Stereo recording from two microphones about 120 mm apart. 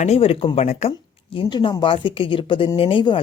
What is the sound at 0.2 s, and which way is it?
Speech, 50° left (ahead or behind).